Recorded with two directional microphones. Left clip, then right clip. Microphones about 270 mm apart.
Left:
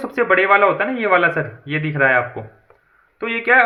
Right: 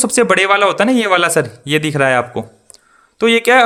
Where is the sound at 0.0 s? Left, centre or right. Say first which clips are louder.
Right 4 dB; right.